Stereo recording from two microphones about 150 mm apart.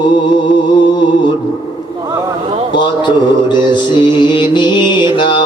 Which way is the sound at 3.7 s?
30° left (ahead or behind).